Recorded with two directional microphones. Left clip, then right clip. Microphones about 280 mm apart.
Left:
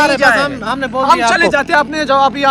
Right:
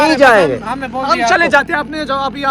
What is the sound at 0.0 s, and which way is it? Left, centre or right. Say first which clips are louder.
Speech: right 2 dB; centre.